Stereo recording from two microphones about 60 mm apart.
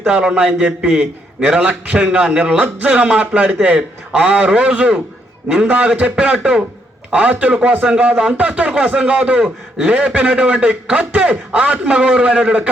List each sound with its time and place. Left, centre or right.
0.0 s a man's voice: centre